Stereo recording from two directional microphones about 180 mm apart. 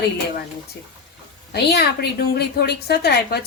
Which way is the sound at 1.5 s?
65° left (ahead or behind).